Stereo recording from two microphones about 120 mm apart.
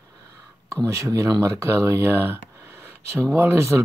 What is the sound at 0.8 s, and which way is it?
Speech, 25° right (ahead or behind).